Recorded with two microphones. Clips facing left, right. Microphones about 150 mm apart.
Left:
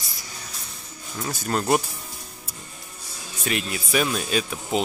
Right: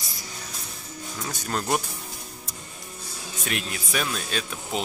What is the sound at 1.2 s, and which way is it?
Speech, 5° left (ahead or behind).